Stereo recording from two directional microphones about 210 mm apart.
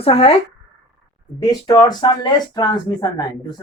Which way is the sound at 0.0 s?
30° left (ahead or behind).